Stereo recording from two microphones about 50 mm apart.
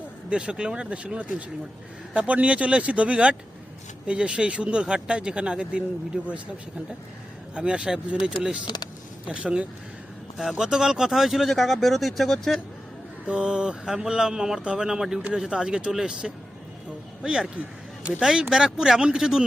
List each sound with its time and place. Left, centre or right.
0.3 s speech: centre
7.5 s speech: right
10.3 s speech: centre
13.2 s speech: right